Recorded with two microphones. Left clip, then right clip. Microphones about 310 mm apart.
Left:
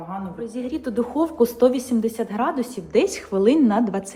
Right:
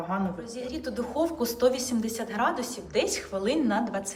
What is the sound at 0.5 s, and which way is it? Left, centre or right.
A woman's voice, centre.